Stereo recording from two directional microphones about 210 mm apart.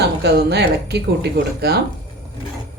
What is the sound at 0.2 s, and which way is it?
Speech, 50° right (ahead or behind).